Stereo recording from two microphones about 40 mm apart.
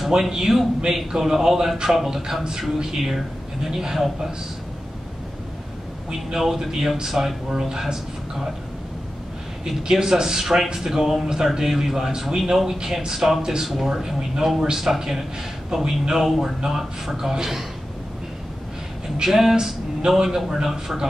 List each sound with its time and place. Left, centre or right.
0.0 s a man's voice: centre
2.8 s a man's voice: centre
6.3 s a man's voice: centre
9.8 s a man's voice: centre
19.2 s a man's voice: centre
19.5 s a man's voice: centre